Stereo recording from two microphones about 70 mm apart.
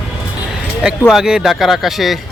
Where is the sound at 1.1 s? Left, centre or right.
Centre.